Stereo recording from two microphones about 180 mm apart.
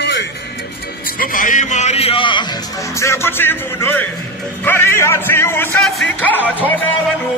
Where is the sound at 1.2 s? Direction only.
50° left (ahead or behind); by 2.4 s 30° left (ahead or behind).